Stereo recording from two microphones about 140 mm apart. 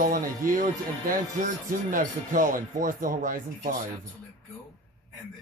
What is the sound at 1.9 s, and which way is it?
Speech, 75° right (ahead or behind).